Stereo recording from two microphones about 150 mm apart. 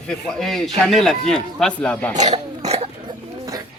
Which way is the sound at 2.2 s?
45° right (ahead or behind).